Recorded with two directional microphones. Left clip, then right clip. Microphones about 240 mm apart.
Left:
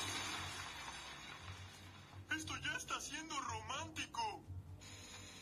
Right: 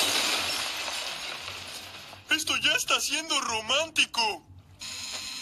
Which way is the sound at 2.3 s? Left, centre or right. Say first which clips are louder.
Right 18 dB; right.